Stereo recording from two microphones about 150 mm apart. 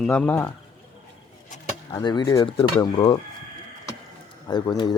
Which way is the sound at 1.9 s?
30° left (ahead or behind).